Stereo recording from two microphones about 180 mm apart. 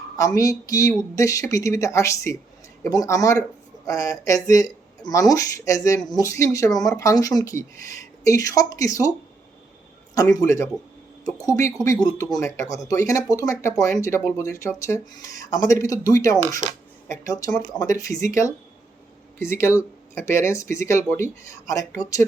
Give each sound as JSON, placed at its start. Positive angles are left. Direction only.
{"t": 0.2, "sound": "speech", "side_deg": 20}
{"t": 10.2, "sound": "speech", "side_deg": 20}
{"t": 17.7, "sound": "speech", "side_deg": 20}